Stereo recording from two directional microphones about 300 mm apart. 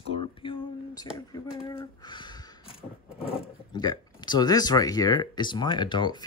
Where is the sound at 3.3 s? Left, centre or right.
Centre.